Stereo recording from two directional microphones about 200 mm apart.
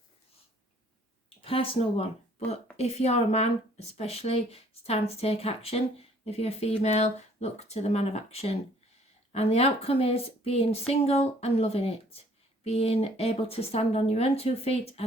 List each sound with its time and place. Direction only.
1.4 s speech: 25° left (ahead or behind)